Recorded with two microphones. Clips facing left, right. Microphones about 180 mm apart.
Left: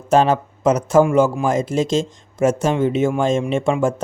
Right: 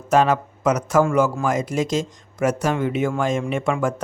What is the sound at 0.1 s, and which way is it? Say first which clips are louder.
Speech: left 2 dB; 30° left (ahead or behind).